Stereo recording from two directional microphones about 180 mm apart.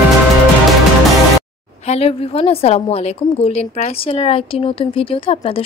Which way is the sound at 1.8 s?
35° left (ahead or behind).